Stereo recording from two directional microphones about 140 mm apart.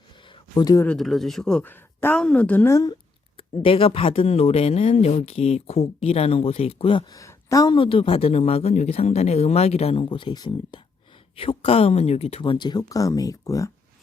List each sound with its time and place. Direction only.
0.5 s speech: 25° left (ahead or behind)
0.9 s speech: centre (ahead or behind)
3.3 s speech: 40° left (ahead or behind)
7.2 s a woman's voice: 25° left (ahead or behind)
7.8 s speech: 40° left (ahead or behind)
11.3 s speech: 40° left (ahead or behind); by 13.7 s 25° left (ahead or behind)